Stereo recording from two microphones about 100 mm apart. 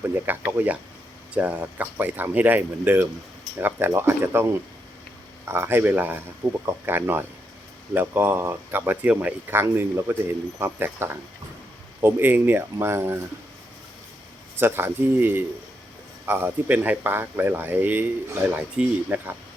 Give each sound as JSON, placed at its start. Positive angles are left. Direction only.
{"t": 0.3, "sound": "speech", "side_deg": -15}
{"t": 5.5, "sound": "speech", "side_deg": -25}
{"t": 14.5, "sound": "speech", "side_deg": -25}